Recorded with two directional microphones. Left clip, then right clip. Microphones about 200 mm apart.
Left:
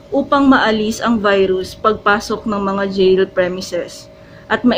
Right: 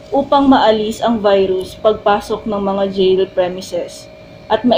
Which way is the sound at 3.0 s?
90° left.